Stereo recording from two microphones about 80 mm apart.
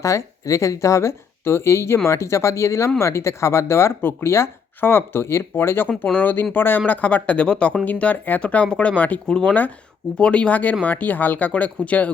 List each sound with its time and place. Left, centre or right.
0.0 s speech: left; by 9.3 s centre
9.3 s speech: centre